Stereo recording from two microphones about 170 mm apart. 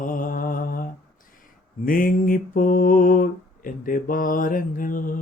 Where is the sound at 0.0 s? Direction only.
50° left (ahead or behind).